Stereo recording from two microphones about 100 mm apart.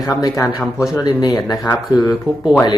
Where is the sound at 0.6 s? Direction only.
5° right (ahead or behind).